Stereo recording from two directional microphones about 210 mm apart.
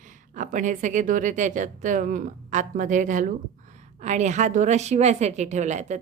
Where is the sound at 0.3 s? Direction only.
40° right (ahead or behind).